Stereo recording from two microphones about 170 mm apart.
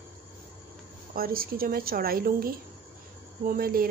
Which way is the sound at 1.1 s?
60° right (ahead or behind).